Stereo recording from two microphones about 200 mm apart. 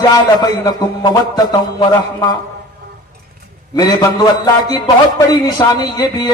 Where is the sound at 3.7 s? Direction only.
20° left (ahead or behind).